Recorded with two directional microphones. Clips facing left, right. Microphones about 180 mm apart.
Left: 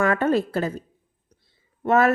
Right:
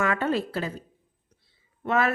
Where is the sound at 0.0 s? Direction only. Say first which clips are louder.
Left 5 dB; 45° left (ahead or behind).